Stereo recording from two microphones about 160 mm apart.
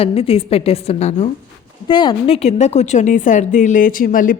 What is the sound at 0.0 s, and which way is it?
A woman's voice, 40° left (ahead or behind).